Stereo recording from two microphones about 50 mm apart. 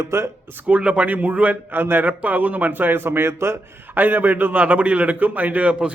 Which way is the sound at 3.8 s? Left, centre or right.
Right.